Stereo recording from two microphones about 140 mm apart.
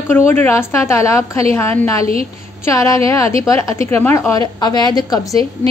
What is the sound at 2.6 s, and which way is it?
A woman's voice, 20° left (ahead or behind).